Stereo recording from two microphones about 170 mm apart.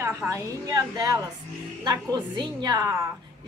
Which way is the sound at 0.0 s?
15° right (ahead or behind).